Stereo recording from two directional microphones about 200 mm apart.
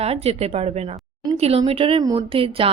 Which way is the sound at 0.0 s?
30° right (ahead or behind).